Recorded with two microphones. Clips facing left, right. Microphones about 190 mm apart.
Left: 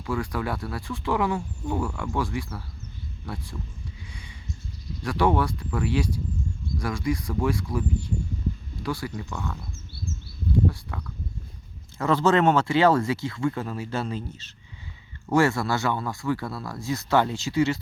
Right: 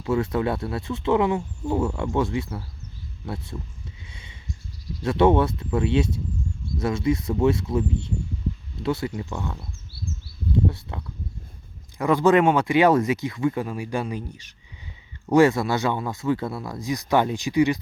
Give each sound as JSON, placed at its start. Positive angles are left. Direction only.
{"t": 0.0, "sound": "speech", "side_deg": -25}
{"t": 4.1, "sound": "a sound", "side_deg": -20}
{"t": 5.0, "sound": "speech", "side_deg": -25}
{"t": 10.7, "sound": "speech", "side_deg": -25}